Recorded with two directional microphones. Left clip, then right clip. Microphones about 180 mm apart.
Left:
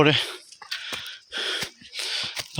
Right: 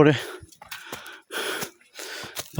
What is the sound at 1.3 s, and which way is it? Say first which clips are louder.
Gasp: left 1 dB; 70° right (ahead or behind).